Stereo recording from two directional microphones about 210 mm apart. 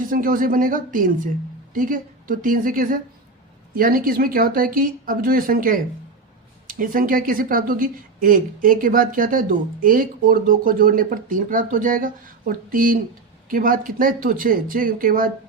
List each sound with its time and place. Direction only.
0.0 s speech: 40° right (ahead or behind)